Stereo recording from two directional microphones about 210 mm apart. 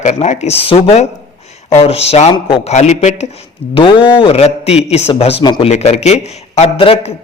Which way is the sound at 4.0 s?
5° right (ahead or behind).